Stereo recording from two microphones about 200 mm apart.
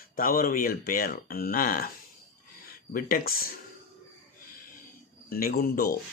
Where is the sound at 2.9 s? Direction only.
45° left (ahead or behind).